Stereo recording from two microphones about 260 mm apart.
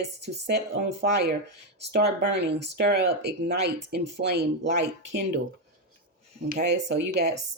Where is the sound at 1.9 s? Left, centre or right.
Right.